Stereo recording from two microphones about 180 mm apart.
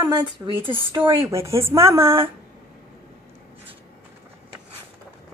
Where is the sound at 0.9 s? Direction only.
15° right (ahead or behind).